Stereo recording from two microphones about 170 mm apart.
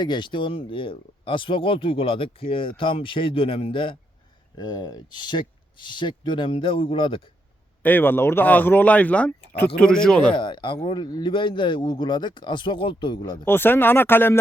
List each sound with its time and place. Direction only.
0.0 s speech: 25° left (ahead or behind)
7.8 s speech: 10° left (ahead or behind)
10.3 s speech: 30° left (ahead or behind)
13.4 s speech: 10° left (ahead or behind)